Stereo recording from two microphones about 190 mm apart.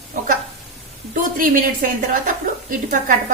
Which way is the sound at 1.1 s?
45° right (ahead or behind).